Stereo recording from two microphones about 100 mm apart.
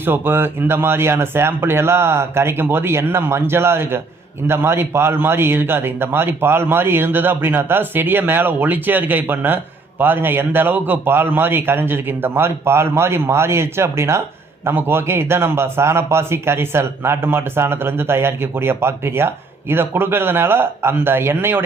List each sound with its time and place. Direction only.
0.0 s a man's voice: 20° right (ahead or behind)